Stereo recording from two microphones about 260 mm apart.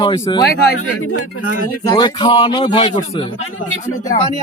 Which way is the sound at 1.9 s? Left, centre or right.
Centre.